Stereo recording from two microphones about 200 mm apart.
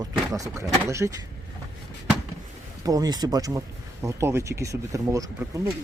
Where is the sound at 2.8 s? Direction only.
20° right (ahead or behind).